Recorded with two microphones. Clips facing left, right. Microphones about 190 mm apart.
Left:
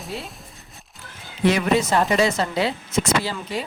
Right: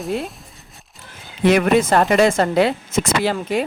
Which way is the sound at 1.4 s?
55° right (ahead or behind).